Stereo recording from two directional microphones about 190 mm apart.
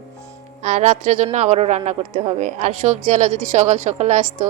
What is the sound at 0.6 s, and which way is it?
A man's voice, 35° right (ahead or behind).